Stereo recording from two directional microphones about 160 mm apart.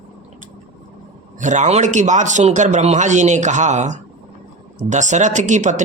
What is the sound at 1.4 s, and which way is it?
A man's voice, 50° right (ahead or behind).